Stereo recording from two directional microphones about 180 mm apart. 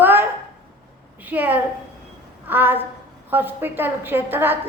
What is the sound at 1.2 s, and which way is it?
A woman's voice, 10° right (ahead or behind).